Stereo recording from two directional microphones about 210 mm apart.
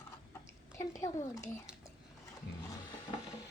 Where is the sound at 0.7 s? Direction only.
15° left (ahead or behind).